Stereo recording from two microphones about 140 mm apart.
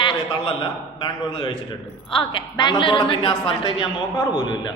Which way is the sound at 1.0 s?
35° left (ahead or behind).